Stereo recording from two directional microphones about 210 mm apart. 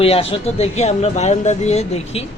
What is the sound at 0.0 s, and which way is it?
Speech, 30° left (ahead or behind).